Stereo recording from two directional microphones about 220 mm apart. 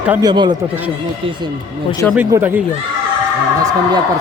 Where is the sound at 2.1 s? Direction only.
10° right (ahead or behind).